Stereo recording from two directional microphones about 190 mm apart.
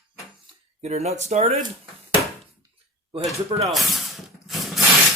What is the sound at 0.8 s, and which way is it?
Speech, 35° right (ahead or behind).